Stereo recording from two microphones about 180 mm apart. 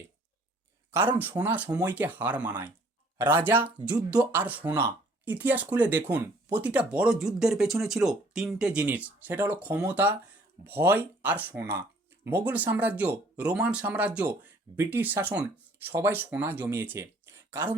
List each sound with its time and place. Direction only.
0.9 s speech: 10° right (ahead or behind)
3.6 s speech: 25° right (ahead or behind)
4.2 s speech: 10° right (ahead or behind)